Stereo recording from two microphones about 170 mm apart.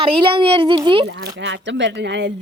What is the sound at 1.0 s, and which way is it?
Speech, 80° right.